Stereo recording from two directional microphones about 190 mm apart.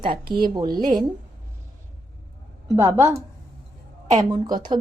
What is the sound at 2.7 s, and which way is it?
Speech, 15° right (ahead or behind).